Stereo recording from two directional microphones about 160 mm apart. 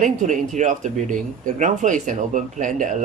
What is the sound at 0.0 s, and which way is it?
Speech, 50° right (ahead or behind).